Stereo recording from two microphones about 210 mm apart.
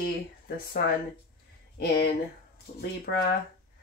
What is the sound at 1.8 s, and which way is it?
Speech, 50° left (ahead or behind).